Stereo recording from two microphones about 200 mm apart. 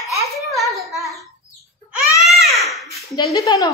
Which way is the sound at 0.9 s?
Centre (ahead or behind).